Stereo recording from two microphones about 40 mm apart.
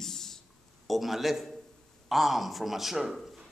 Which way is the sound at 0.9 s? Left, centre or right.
Centre.